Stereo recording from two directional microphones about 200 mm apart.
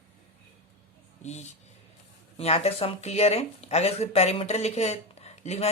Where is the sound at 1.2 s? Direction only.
35° left (ahead or behind).